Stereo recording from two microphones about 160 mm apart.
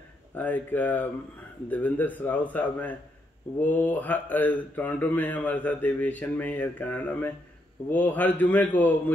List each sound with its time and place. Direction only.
0.3 s speech: 10° left (ahead or behind)